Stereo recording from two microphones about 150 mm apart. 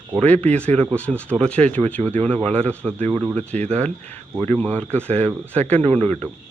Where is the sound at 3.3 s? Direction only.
45° right (ahead or behind).